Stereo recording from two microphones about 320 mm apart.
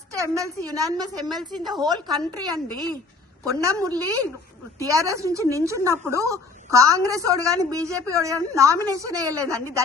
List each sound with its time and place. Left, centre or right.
0.1 s a woman's voice: centre